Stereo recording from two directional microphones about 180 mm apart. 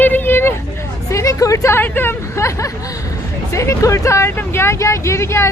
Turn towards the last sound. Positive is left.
turn(degrees=15)  # may be behind; listen again after turning